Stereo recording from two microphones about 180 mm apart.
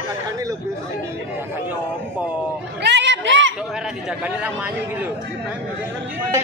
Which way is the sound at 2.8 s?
75° right (ahead or behind).